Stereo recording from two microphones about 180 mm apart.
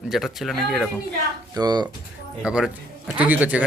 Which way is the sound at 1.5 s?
20° right (ahead or behind).